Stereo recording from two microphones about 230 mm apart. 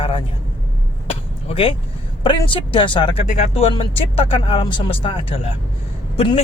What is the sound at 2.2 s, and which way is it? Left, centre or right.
Speech, left.